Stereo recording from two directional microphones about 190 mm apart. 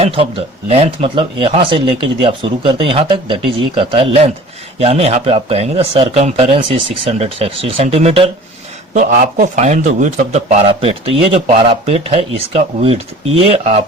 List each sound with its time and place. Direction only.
0.0 s a man's voice: 30° right (ahead or behind)
8.9 s a man's voice: 40° right (ahead or behind)